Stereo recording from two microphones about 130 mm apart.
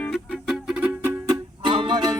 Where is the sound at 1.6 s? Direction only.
40° right (ahead or behind).